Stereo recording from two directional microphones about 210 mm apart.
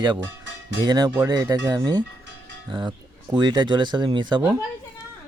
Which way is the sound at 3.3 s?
20° right (ahead or behind).